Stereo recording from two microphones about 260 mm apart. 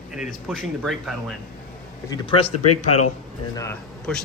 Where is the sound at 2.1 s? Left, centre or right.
Centre.